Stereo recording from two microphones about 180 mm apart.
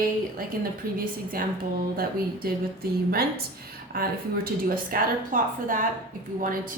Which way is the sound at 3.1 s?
55° right (ahead or behind).